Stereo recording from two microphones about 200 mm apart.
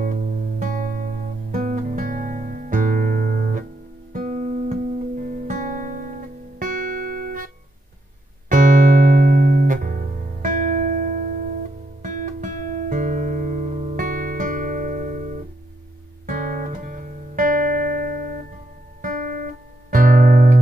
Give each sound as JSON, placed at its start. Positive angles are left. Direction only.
{"t": 0.0, "sound": "music", "side_deg": -40}
{"t": 4.1, "sound": "guitar", "side_deg": -40}
{"t": 8.5, "sound": "music", "side_deg": -40}
{"t": 12.0, "sound": "guitar", "side_deg": -40}
{"t": 18.9, "sound": "music", "side_deg": -40}